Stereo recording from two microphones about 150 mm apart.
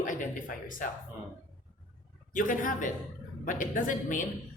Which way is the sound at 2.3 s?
65° left (ahead or behind).